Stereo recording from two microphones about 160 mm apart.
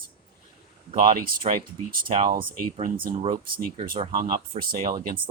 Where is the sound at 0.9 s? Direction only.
40° right (ahead or behind).